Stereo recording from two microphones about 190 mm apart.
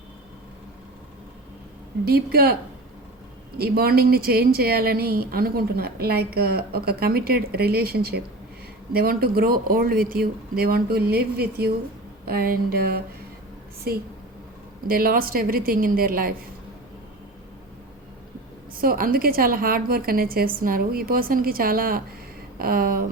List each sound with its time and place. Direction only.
2.0 s a woman's voice: 55° right (ahead or behind)
3.6 s a woman's voice: 55° right (ahead or behind)
18.8 s a woman's voice: 50° right (ahead or behind)